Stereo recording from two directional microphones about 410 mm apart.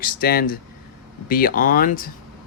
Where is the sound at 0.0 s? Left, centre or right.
Left.